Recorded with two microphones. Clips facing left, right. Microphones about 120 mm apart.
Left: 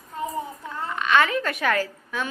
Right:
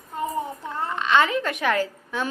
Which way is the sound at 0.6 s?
25° right (ahead or behind).